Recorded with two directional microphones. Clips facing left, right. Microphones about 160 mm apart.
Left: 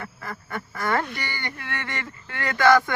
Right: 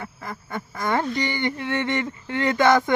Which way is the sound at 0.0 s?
15° right (ahead or behind).